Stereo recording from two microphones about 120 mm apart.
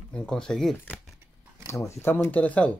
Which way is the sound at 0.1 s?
5° left (ahead or behind).